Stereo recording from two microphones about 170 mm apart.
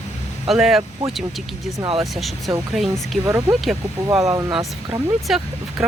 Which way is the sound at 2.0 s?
Centre (ahead or behind).